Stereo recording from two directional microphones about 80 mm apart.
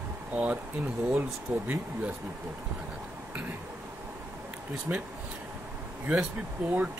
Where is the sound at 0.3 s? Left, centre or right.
Centre.